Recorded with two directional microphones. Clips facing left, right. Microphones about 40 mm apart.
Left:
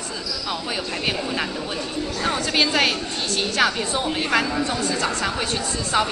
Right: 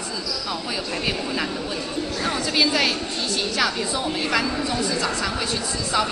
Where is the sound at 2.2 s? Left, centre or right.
Left.